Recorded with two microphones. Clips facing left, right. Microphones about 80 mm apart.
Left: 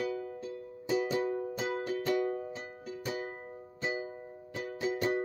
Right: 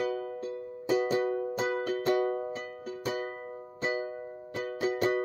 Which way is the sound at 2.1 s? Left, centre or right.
Right.